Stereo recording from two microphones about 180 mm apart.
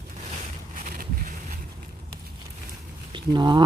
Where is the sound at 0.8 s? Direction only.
50° right (ahead or behind).